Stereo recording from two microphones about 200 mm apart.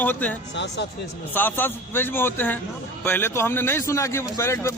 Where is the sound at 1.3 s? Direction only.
10° left (ahead or behind).